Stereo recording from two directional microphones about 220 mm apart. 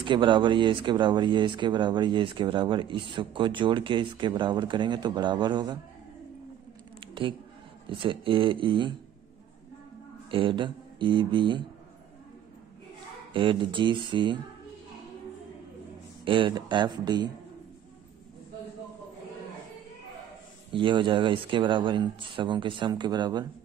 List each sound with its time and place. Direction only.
0.0 s speech: 20° right (ahead or behind)
7.0 s a sound: 20° right (ahead or behind)
7.9 s speech: 25° right (ahead or behind)
10.3 s speech: 20° right (ahead or behind)
13.3 s speech: 20° right (ahead or behind)
16.3 s speech: 20° right (ahead or behind)
20.7 s speech: 20° right (ahead or behind)